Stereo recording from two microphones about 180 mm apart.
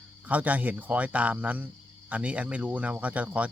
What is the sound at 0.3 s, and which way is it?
Speech, 10° right (ahead or behind).